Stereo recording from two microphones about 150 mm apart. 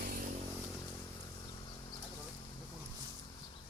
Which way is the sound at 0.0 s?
80° right.